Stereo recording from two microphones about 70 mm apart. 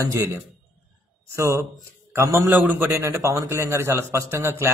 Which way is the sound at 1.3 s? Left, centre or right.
Right.